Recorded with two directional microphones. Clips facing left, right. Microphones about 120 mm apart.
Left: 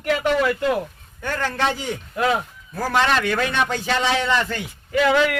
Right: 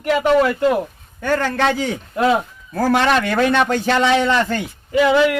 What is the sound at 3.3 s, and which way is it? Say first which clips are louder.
Speech: right 6 dB; 45° right (ahead or behind).